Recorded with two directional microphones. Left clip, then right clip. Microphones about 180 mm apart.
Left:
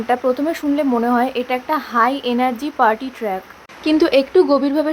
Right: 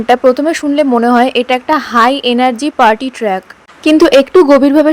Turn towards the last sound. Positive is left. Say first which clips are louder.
# right 10 dB
turn(degrees=-40)  # may be behind; listen again after turning